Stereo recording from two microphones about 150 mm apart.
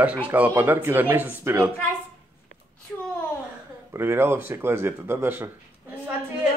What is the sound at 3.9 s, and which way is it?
Speech, 15° right (ahead or behind).